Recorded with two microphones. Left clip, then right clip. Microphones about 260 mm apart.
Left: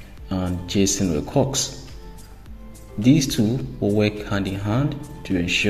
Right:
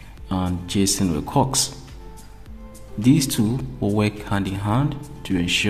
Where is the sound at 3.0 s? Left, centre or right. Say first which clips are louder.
Left 1 dB; centre.